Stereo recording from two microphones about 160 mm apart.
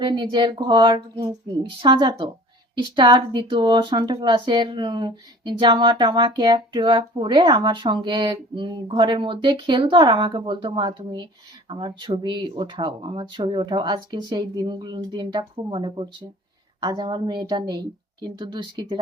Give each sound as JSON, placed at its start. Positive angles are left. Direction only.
{"t": 0.0, "sound": "speech", "side_deg": -30}